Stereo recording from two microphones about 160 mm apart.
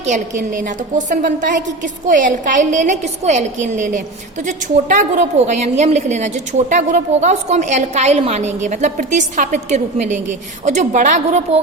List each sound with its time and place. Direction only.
0.0 s a woman's voice: 50° right (ahead or behind)